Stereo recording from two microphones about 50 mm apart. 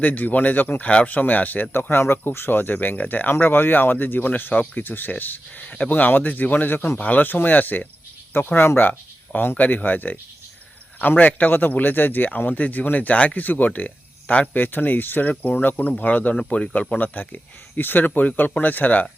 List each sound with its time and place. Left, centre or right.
0.0 s speech: left
0.9 s speech: left
1.7 s speech: left
7.0 s speech: left